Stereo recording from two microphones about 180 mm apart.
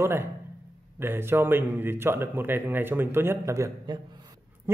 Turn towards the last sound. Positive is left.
turn(degrees=-20)  # may be behind; listen again after turning